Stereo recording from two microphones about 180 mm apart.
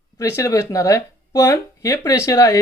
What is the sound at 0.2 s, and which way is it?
Speech, 15° left (ahead or behind).